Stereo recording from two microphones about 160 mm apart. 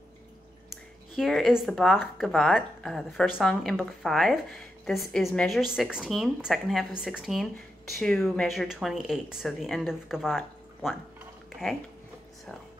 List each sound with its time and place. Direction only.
1.1 s a woman's voice: centre (ahead or behind)